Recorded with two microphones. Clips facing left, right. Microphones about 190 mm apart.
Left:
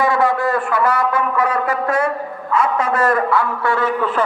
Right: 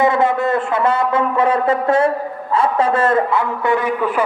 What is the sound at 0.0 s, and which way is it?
A man's voice, 20° right (ahead or behind).